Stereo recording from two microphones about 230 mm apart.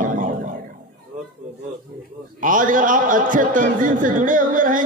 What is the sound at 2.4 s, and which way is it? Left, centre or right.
A man's voice, right.